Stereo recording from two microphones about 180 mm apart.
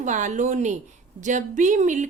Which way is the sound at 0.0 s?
45° right (ahead or behind).